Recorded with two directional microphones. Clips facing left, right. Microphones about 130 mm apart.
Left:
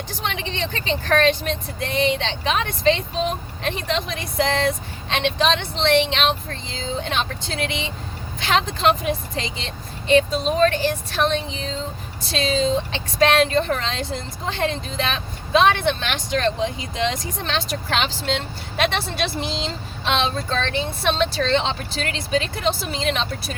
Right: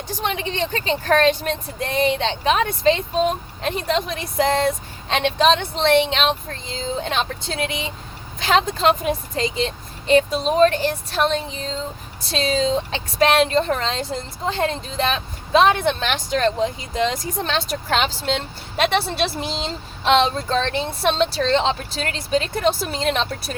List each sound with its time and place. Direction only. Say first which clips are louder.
0.3 s a woman's voice: right 3 dB; 45° right (ahead or behind)
12.9 s a woman's voice: even; 35° right (ahead or behind)